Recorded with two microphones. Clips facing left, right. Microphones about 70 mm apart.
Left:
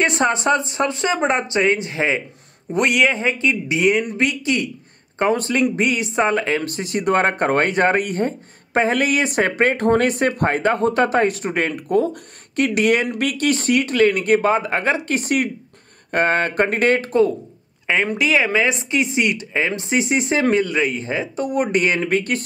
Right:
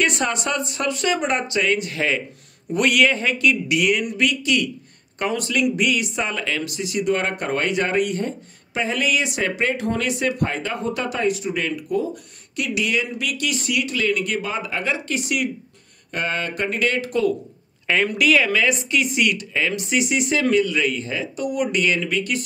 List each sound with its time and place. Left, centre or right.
0.0 s speech: left
17.8 s speech: left